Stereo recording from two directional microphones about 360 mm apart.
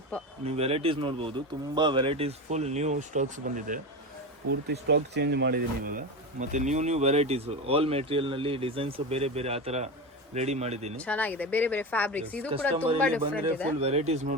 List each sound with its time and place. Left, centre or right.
0.1 s speech: centre
0.4 s speech: centre
10.9 s speech: centre
12.7 s speech: centre
13.0 s speech: centre
13.7 s speech: centre